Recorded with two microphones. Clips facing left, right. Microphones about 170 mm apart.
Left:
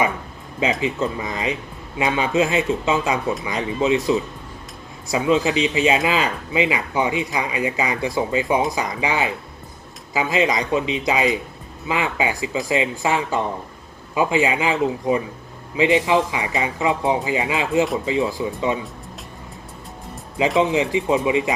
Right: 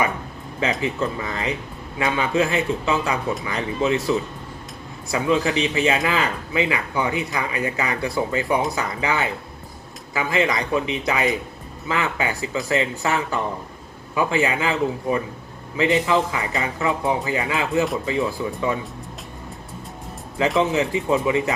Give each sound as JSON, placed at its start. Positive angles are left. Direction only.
{"t": 0.6, "sound": "speech", "side_deg": 20}
{"t": 20.6, "sound": "speech", "side_deg": 20}